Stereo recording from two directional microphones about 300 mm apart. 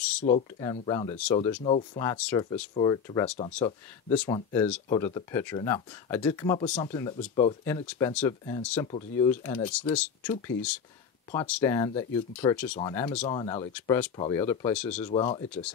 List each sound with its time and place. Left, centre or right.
0.2 s speech: left; by 2.6 s centre
2.7 s speech: centre
9.3 s speech: centre
11.3 s speech: centre
15.0 s speech: centre